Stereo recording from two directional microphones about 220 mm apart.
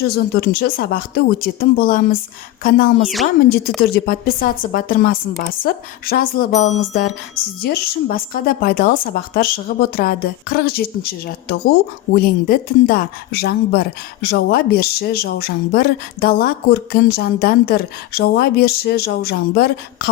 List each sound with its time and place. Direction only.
0.3 s speech: 45° left (ahead or behind)
3.9 s speech: 40° left (ahead or behind)